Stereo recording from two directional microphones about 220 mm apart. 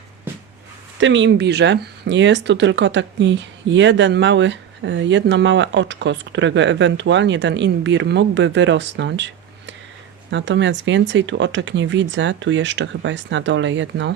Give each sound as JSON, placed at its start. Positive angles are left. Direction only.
{"t": 0.9, "sound": "speech", "side_deg": -55}